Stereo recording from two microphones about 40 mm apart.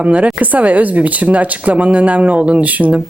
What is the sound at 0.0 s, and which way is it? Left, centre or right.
Speech, right.